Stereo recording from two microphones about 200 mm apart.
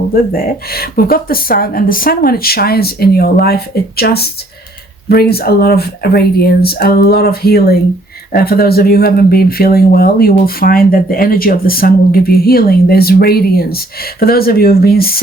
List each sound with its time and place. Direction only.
0.1 s speech: 45° left (ahead or behind)